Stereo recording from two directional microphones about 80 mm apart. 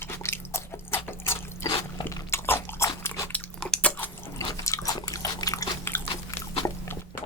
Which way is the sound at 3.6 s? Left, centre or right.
Centre.